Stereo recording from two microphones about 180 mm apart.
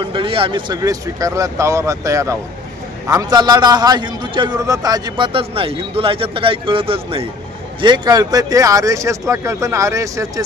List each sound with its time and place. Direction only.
0.0 s a man's voice: 30° right (ahead or behind)